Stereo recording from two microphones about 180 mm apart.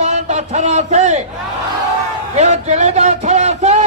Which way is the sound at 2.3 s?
40° right (ahead or behind).